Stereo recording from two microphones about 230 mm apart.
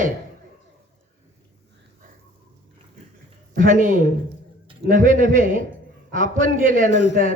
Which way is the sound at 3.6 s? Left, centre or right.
Right.